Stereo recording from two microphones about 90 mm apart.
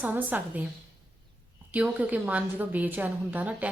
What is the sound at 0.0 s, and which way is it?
Speech, 20° right (ahead or behind).